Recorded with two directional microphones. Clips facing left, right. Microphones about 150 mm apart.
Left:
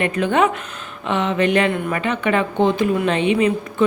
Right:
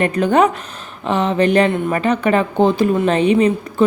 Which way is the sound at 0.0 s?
40° right (ahead or behind).